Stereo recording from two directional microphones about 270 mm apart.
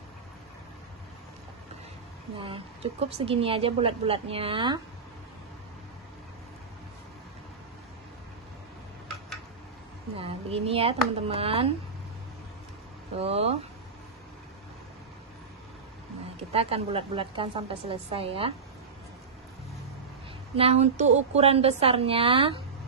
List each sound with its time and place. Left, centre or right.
2.3 s a woman's voice: centre
10.1 s a woman's voice: right
13.2 s a woman's voice: right
16.5 s a woman's voice: right
20.5 s a woman's voice: right